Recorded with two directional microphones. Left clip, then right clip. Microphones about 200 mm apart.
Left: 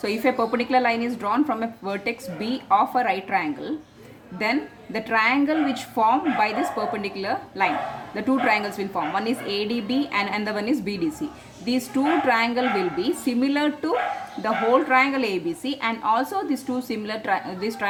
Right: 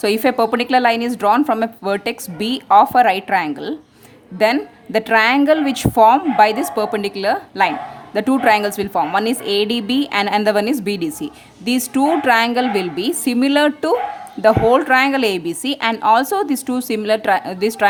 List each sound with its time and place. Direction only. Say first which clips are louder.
0.0 s a woman's voice: right 7 dB; 55° right (ahead or behind)